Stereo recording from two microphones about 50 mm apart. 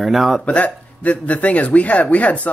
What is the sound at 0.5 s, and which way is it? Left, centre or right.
Speech, left.